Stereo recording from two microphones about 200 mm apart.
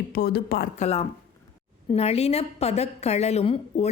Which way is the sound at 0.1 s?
50° left (ahead or behind).